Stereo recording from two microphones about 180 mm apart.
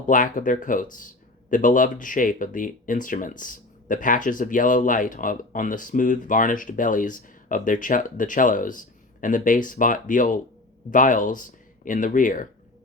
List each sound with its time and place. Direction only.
0.0 s speech: 45° left (ahead or behind)